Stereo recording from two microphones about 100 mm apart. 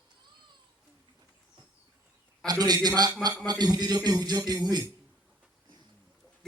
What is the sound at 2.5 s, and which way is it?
Music, 40° right (ahead or behind).